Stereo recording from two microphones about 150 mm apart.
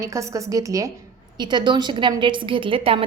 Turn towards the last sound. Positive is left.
turn(degrees=-35)  # may be behind; listen again after turning